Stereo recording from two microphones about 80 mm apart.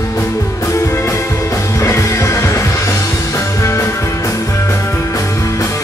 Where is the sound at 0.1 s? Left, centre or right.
Left.